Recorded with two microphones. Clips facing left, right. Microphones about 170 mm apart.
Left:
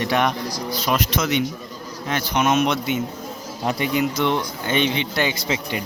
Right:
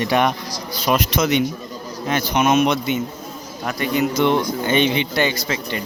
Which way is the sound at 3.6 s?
25° left (ahead or behind).